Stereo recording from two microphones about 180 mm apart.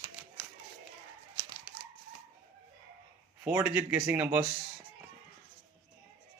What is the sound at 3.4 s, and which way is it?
Speech, 10° right (ahead or behind).